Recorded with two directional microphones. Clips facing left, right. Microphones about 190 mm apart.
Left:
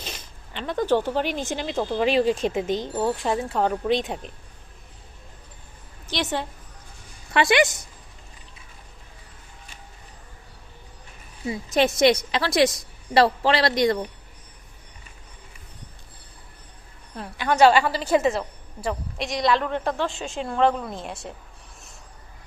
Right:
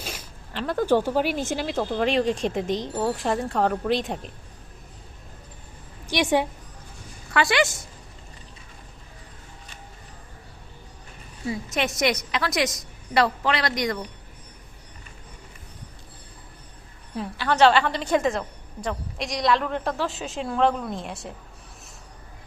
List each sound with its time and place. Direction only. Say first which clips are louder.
0.0 s speech: right 2 dB; 10° right (ahead or behind)
6.1 s a woman's voice: right 5 dB; 15° right (ahead or behind)
7.3 s a woman's voice: left 3 dB; 20° left (ahead or behind)
11.4 s a woman's voice: left 5 dB; 30° left (ahead or behind)
17.3 s speech: left 2 dB; 15° left (ahead or behind)